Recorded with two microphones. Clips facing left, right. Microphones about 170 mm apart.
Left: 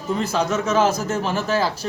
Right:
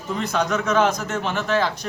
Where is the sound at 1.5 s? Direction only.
35° left (ahead or behind).